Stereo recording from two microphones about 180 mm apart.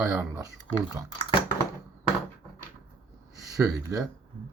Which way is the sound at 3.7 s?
20° right (ahead or behind).